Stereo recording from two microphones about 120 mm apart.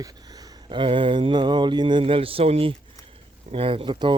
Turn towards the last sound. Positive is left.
turn(degrees=-40)  # may be behind; listen again after turning